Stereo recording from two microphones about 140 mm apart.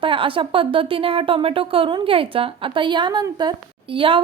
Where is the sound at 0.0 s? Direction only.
40° right (ahead or behind).